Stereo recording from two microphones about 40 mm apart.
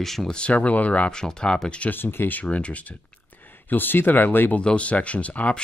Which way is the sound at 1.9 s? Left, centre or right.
Left.